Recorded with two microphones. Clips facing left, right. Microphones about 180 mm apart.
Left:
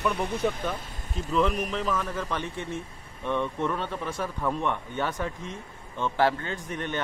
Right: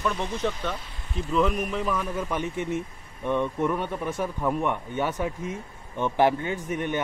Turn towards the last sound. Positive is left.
turn(degrees=-15)  # may be behind; listen again after turning